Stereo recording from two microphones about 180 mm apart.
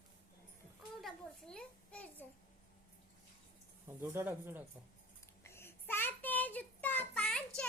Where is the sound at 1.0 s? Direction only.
5° left (ahead or behind).